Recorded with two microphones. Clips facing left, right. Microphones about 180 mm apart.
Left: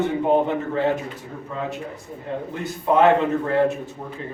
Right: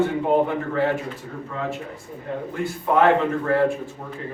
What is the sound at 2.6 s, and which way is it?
Speech, 20° left (ahead or behind).